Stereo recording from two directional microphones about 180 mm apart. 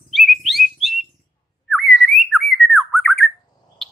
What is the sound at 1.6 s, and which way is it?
Whistling, centre (ahead or behind).